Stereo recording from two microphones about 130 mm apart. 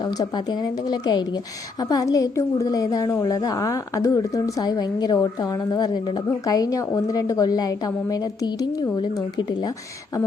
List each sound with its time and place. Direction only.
0.0 s a woman's voice: 35° left (ahead or behind)